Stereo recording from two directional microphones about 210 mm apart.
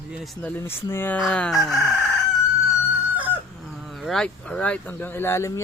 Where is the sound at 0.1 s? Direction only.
Centre (ahead or behind).